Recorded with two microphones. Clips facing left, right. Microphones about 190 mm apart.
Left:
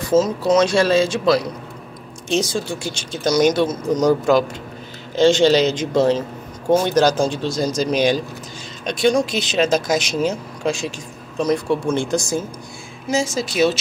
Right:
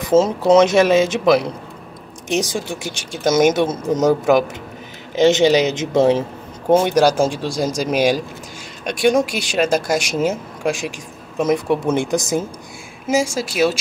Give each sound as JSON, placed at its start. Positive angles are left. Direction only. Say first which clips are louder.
{"t": 0.0, "sound": "a woman's voice", "louder": "right 2 dB", "side_deg": -25}